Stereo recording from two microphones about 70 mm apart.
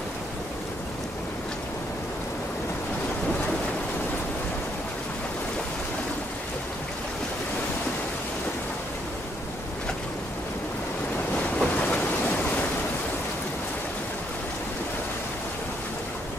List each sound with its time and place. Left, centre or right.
11.5 s waves: centre